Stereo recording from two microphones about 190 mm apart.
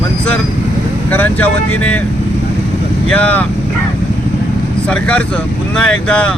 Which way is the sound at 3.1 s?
10° left (ahead or behind).